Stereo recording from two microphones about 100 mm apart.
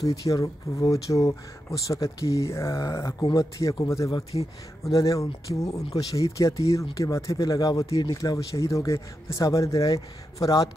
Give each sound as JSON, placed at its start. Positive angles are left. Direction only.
{"t": 0.1, "sound": "speech", "side_deg": 35}